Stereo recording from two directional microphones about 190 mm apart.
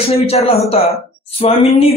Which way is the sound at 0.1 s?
35° left (ahead or behind).